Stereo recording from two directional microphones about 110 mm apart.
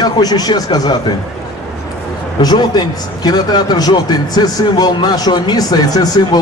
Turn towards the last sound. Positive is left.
turn(degrees=35)  # may be behind; listen again after turning